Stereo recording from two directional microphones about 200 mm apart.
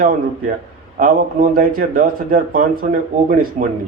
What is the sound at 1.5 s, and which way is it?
A man's voice, 45° right (ahead or behind).